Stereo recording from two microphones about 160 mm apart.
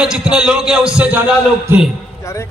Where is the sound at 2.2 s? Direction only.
15° left (ahead or behind).